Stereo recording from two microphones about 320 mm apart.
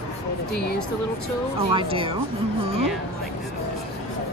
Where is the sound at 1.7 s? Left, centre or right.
Centre.